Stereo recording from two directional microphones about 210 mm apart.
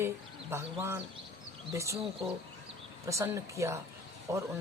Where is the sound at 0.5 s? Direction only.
10° right (ahead or behind).